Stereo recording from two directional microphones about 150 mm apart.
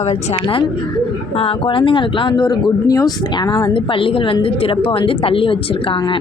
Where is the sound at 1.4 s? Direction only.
35° left (ahead or behind).